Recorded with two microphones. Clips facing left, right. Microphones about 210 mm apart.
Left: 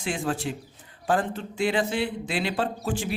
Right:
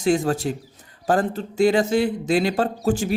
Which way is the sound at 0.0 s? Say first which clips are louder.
Right 8 dB; 40° right (ahead or behind).